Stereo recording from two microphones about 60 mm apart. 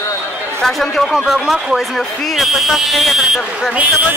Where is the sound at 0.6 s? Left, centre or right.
Centre.